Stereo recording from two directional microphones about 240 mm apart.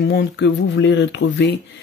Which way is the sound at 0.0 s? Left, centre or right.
Left.